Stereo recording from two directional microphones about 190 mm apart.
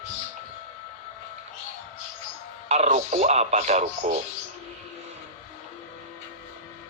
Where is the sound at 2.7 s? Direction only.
35° right (ahead or behind).